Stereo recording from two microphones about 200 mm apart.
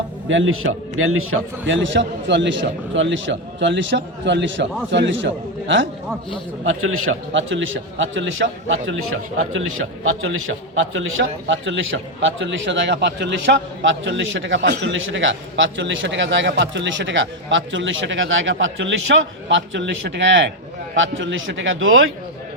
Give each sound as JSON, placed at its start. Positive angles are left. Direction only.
{"t": 0.3, "sound": "a man's voice", "side_deg": -70}
{"t": 6.7, "sound": "a man's voice", "side_deg": -90}